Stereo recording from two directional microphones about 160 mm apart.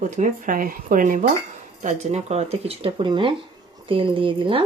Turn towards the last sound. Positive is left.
turn(degrees=-30)  # may be behind; listen again after turning